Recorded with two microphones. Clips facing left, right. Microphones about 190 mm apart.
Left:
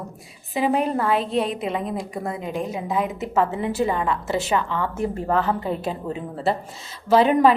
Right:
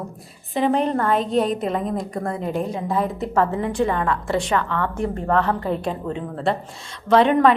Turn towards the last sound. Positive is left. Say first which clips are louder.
# right 1 dB
turn(degrees=5)  # may be behind; listen again after turning